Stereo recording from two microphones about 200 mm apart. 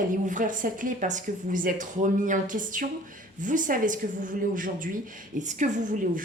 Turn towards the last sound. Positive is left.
turn(degrees=-40)  # may be behind; listen again after turning